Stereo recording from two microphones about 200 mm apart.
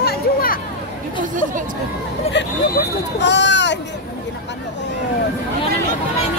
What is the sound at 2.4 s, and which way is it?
Hubbub, 60° left (ahead or behind).